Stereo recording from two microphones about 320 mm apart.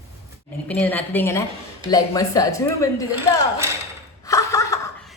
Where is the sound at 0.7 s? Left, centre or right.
Centre.